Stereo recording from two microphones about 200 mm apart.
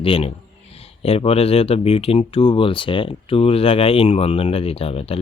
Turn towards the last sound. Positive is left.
turn(degrees=30)  # may be behind; listen again after turning